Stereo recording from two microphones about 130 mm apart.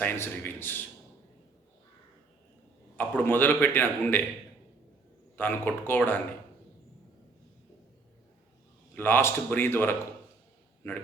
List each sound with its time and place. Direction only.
0.0 s a man's voice: 15° left (ahead or behind)
2.9 s a man's voice: 15° left (ahead or behind)
5.4 s a man's voice: 15° left (ahead or behind)
9.0 s a man's voice: 15° left (ahead or behind)